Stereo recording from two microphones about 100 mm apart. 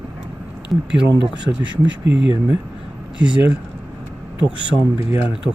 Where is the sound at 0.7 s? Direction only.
Centre (ahead or behind).